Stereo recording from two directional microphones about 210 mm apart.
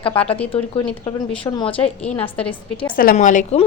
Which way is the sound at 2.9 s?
40° left (ahead or behind).